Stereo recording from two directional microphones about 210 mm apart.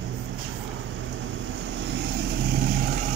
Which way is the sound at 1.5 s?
60° right (ahead or behind).